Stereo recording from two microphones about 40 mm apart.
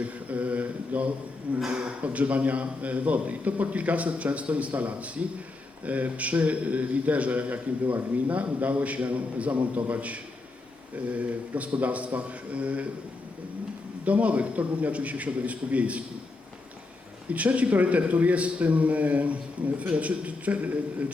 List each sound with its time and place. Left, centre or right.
0.0 s mantra: right
1.5 s a man's voice: right
14.0 s a man's voice: right
17.2 s a man's voice: right